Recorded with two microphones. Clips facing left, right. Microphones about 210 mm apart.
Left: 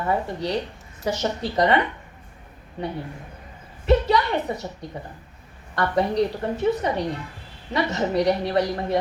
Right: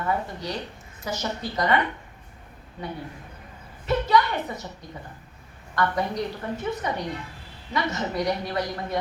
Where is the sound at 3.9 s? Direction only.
30° left (ahead or behind).